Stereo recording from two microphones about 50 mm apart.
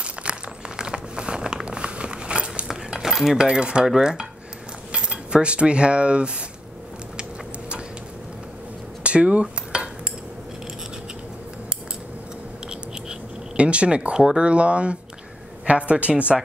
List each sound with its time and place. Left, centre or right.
0.0 s crumpling: right
2.9 s dishes: centre
3.4 s speech: centre
3.8 s dishes: centre
4.9 s cutlery: right
9.0 s dishes: right
13.6 s speech: right